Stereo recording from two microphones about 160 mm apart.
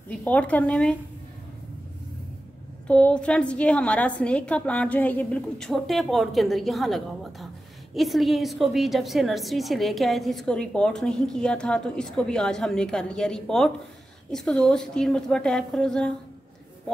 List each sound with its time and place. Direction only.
0.2 s a woman's voice: 10° left (ahead or behind)
2.9 s a woman's voice: 5° left (ahead or behind)